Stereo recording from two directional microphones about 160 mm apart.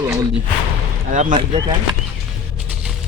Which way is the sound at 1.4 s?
30° right (ahead or behind).